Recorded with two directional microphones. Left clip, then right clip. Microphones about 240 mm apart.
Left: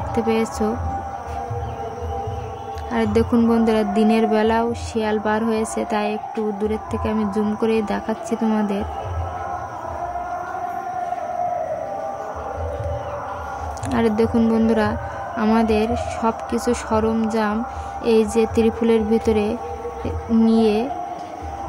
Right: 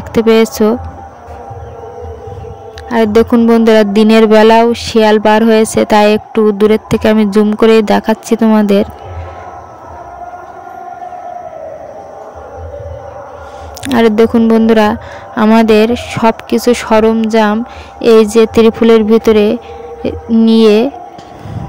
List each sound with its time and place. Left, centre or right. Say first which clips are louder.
0.1 s speech: right 13 dB; right
2.9 s speech: right 11 dB; right
13.8 s speech: right 11 dB; right